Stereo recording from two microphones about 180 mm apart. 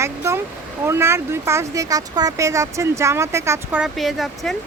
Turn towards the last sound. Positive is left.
turn(degrees=0)  # may be behind; listen again after turning